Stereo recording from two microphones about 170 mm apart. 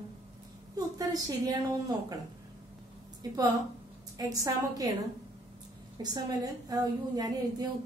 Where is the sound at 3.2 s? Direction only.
25° right (ahead or behind).